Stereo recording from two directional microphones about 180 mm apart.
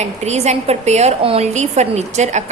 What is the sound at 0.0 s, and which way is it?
A woman's voice, 40° right (ahead or behind).